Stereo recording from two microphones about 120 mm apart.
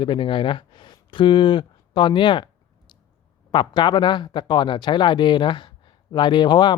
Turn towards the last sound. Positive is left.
turn(degrees=40)  # may be behind; listen again after turning